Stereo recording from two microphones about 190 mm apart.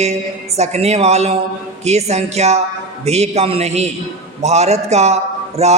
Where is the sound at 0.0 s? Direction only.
35° right (ahead or behind).